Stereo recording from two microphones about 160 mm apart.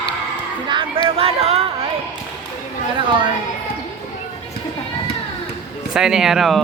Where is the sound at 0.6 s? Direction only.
30° right (ahead or behind).